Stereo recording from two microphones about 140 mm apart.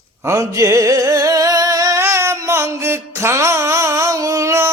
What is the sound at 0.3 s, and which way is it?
Singing, 20° right (ahead or behind).